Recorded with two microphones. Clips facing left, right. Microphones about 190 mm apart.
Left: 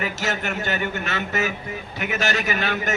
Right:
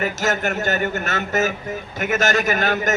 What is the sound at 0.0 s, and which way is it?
A man's voice, 45° right (ahead or behind).